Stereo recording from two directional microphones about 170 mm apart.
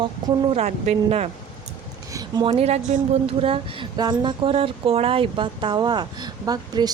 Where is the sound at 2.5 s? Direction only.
40° right (ahead or behind).